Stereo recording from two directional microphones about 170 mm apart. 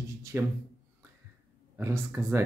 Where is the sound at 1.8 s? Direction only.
15° right (ahead or behind).